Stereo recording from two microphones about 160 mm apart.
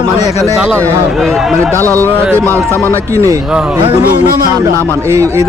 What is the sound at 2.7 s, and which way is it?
Speech, 15° left (ahead or behind).